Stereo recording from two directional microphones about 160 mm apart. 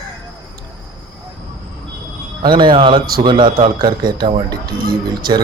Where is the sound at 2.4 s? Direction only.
30° right (ahead or behind).